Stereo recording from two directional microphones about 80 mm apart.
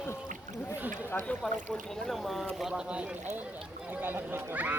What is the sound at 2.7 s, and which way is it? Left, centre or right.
Speech, centre.